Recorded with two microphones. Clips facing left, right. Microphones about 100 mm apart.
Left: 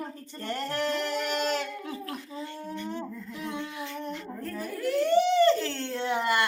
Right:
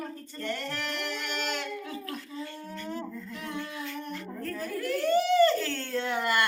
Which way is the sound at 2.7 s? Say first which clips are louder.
Left 1 dB; 20° left (ahead or behind).